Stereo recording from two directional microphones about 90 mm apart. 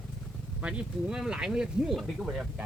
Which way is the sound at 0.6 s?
15° right (ahead or behind).